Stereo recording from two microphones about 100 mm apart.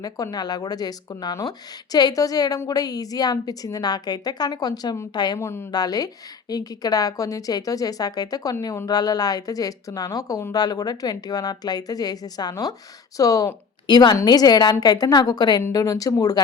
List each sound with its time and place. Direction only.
0.0 s a woman's voice: 40° left (ahead or behind)
5.4 s a woman's voice: 25° left (ahead or behind)
5.7 s speech: 40° left (ahead or behind)
13.8 s a woman's voice: 45° left (ahead or behind)